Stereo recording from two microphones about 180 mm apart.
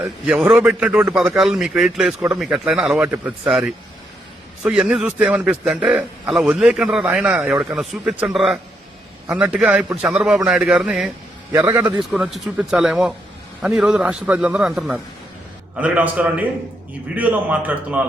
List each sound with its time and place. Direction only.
0.0 s a man's voice: 5° right (ahead or behind)
11.5 s a man's voice: 15° right (ahead or behind)